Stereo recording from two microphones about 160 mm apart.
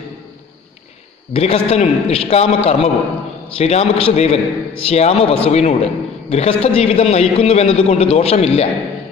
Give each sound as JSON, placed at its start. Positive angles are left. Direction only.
{"t": 1.3, "sound": "a man's voice", "side_deg": 40}